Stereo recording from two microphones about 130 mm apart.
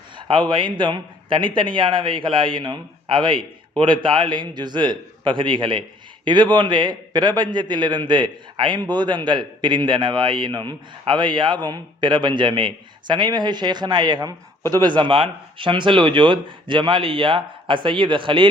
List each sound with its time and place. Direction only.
0.2 s a man's voice: 40° right (ahead or behind)